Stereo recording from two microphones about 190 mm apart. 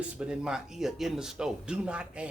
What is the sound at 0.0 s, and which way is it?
Speech, 5° right (ahead or behind).